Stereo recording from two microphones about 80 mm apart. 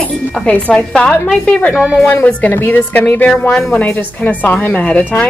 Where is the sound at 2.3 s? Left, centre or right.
Centre.